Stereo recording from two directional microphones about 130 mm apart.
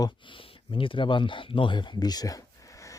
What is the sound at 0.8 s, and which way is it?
Speech, 40° left (ahead or behind).